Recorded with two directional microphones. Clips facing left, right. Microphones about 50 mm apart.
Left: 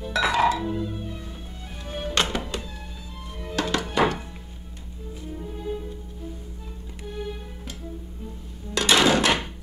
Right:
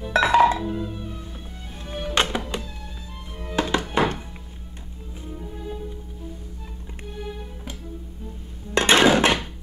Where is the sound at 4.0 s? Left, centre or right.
Right.